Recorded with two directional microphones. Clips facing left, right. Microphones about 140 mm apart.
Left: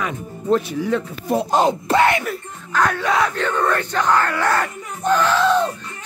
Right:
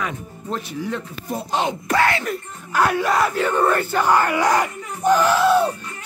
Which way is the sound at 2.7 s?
10° right (ahead or behind).